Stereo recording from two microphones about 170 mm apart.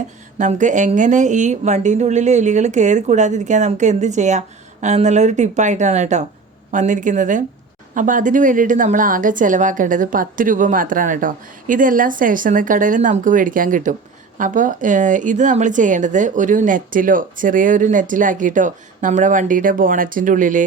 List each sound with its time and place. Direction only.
0.3 s a woman's voice: 45° right (ahead or behind)